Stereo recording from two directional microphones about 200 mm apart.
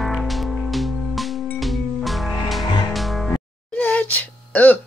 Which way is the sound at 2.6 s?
20° left (ahead or behind).